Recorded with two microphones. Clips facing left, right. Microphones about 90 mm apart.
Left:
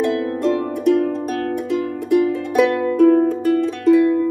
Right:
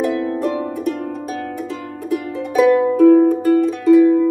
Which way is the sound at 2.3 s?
15° right (ahead or behind).